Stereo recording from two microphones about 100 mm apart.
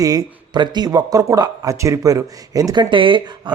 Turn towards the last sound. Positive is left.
turn(degrees=-55)  # may be behind; listen again after turning